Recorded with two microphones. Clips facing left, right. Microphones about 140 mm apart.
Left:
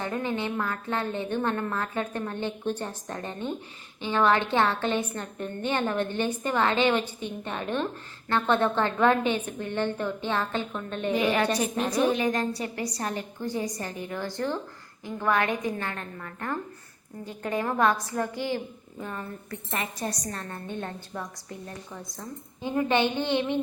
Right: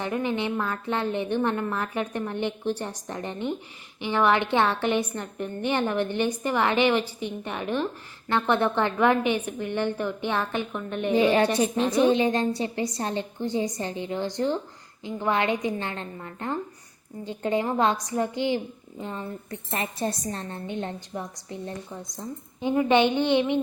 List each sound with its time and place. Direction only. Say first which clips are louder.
0.0 s a woman's voice: right 2 dB; 15° right (ahead or behind)
11.1 s a woman's voice: right 4 dB; 30° right (ahead or behind)